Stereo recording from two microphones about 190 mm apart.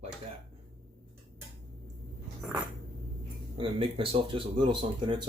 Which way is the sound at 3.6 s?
30° right (ahead or behind).